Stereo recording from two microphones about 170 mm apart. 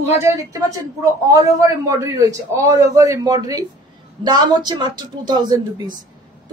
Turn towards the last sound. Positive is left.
turn(degrees=-25)  # may be behind; listen again after turning